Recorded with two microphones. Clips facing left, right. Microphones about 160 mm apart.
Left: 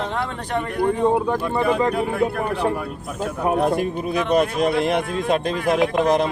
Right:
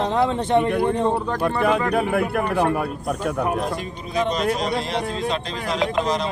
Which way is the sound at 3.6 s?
55° left (ahead or behind).